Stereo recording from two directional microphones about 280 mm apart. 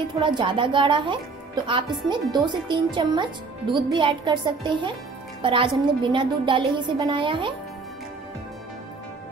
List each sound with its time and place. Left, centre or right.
0.2 s speech: centre